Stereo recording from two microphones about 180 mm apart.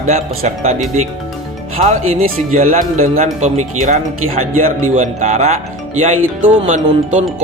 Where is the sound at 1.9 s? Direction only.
40° right (ahead or behind).